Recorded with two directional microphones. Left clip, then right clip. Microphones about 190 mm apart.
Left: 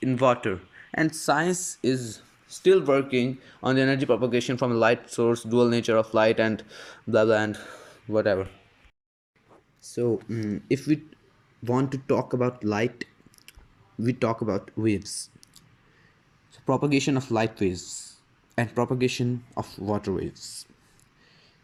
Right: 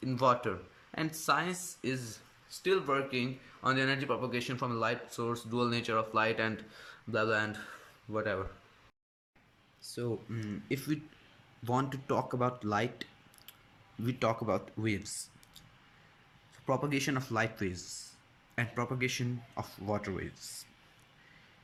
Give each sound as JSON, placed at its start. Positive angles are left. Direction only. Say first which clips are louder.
{"t": 0.0, "sound": "speech", "louder": "left 7 dB", "side_deg": 15}
{"t": 9.9, "sound": "speech", "louder": "left 12 dB", "side_deg": 15}
{"t": 16.5, "sound": "speech", "louder": "left 8 dB", "side_deg": 15}